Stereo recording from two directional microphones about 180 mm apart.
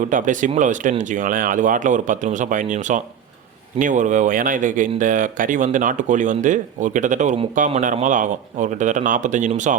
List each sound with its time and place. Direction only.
0.0 s speech: 45° right (ahead or behind)